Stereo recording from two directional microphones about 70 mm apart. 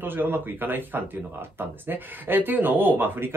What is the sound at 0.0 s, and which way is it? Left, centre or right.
Speech, right.